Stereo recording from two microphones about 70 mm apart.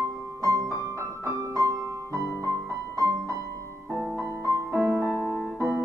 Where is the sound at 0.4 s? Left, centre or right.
Right.